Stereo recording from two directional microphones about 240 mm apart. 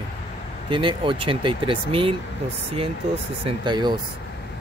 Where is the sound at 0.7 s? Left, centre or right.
Right.